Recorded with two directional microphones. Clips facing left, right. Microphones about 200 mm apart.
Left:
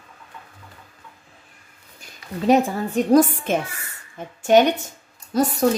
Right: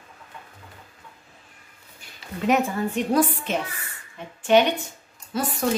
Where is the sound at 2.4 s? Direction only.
35° left (ahead or behind).